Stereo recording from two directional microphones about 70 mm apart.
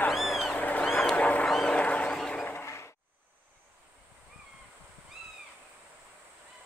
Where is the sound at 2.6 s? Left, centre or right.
Left.